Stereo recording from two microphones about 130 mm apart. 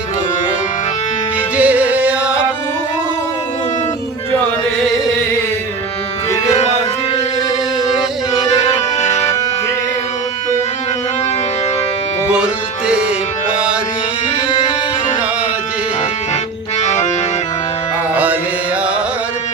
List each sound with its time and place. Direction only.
1.5 s music: 10° right (ahead or behind)
9.0 s music: 65° left (ahead or behind)
16.8 s accordion: 65° left (ahead or behind)
18.1 s music: 10° right (ahead or behind)